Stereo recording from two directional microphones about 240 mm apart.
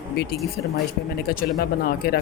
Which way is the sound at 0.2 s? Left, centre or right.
Left.